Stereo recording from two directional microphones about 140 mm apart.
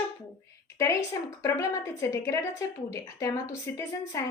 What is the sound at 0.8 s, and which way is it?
A woman's voice, 20° left (ahead or behind).